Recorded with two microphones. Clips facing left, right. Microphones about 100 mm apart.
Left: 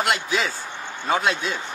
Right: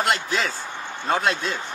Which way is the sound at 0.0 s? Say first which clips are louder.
Even; centre (ahead or behind).